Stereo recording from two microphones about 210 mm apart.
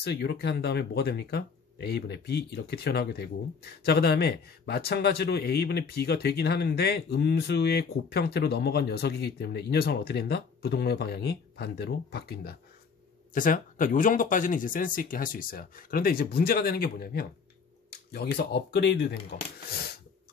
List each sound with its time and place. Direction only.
0.0 s speech: 50° left (ahead or behind)